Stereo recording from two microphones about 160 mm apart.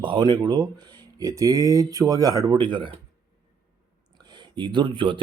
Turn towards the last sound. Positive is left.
turn(degrees=-30)  # may be behind; listen again after turning